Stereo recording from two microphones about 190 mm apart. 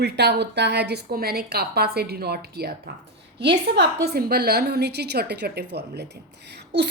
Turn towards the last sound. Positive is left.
turn(degrees=-60)  # may be behind; listen again after turning